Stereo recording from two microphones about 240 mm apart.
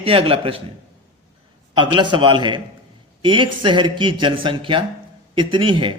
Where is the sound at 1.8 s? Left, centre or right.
Centre.